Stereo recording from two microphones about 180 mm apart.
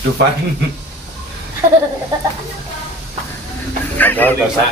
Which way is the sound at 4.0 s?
10° left (ahead or behind).